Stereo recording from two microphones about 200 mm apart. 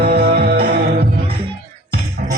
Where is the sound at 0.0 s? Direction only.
55° right (ahead or behind).